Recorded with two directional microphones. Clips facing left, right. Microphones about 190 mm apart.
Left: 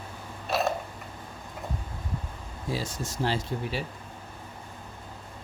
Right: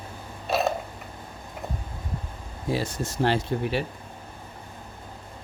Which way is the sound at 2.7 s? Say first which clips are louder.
Right 5 dB; 60° right (ahead or behind).